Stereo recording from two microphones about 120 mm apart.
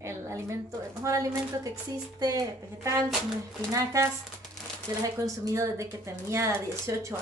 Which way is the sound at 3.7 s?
25° right (ahead or behind).